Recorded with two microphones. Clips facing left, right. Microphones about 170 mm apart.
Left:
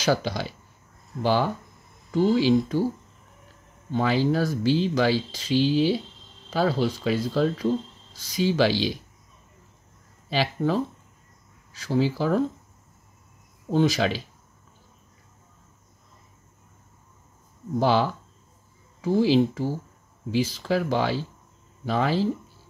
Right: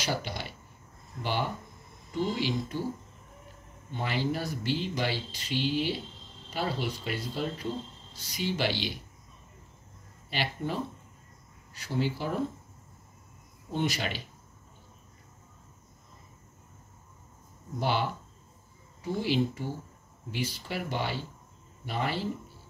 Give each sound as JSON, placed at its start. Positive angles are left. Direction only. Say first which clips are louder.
{"t": 0.0, "sound": "speech", "louder": "left 9 dB", "side_deg": 90}
{"t": 3.9, "sound": "speech", "louder": "left 9 dB", "side_deg": 90}
{"t": 10.4, "sound": "speech", "louder": "left 8 dB", "side_deg": 90}
{"t": 13.7, "sound": "speech", "louder": "left 9 dB", "side_deg": 90}
{"t": 17.7, "sound": "speech", "louder": "left 8 dB", "side_deg": 90}